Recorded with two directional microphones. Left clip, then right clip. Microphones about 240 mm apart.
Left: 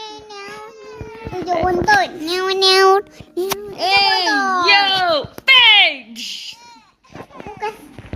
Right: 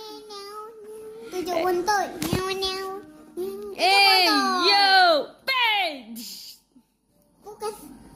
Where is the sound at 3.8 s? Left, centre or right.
Centre.